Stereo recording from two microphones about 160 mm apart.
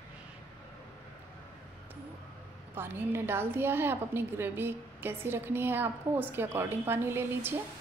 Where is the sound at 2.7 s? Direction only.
15° right (ahead or behind).